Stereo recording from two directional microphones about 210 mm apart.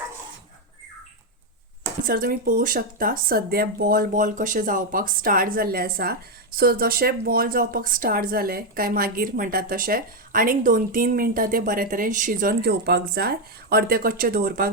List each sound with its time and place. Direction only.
2.0 s speech: 45° right (ahead or behind)